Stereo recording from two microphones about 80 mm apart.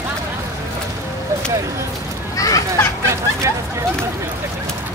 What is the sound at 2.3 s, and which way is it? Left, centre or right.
Speech, left.